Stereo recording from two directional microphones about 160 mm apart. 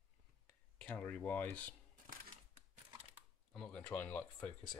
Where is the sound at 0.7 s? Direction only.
10° left (ahead or behind).